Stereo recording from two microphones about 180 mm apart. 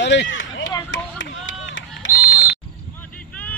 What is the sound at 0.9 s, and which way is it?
Chop, 90° left.